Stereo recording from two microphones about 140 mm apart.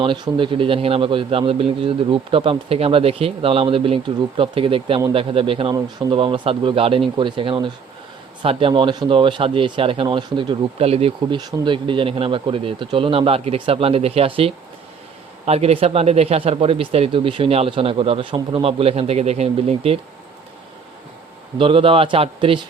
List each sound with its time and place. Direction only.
0.0 s speech: 35° right (ahead or behind)
11.3 s speech: 30° right (ahead or behind)
21.6 s speech: 40° right (ahead or behind)